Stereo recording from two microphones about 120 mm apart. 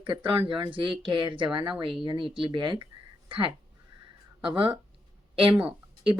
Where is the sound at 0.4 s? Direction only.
45° right (ahead or behind).